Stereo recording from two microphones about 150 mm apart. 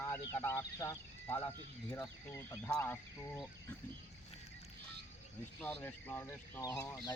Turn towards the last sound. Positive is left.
turn(degrees=20)  # may be behind; listen again after turning